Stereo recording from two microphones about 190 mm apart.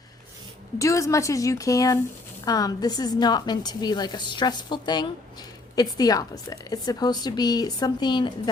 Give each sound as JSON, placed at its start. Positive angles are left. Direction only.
{"t": 0.8, "sound": "a woman's voice", "side_deg": 15}